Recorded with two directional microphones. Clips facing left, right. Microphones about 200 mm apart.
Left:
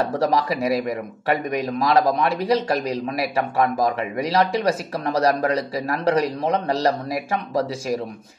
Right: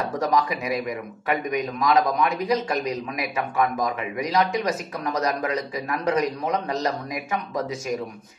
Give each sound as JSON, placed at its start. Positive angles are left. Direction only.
{"t": 0.0, "sound": "a man's voice", "side_deg": 30}